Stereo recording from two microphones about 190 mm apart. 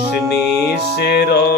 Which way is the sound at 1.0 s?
60° left (ahead or behind).